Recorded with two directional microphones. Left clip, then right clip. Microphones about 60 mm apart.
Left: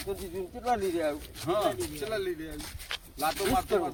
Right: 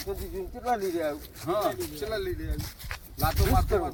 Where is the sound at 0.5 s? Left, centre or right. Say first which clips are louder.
Right 1 dB; right.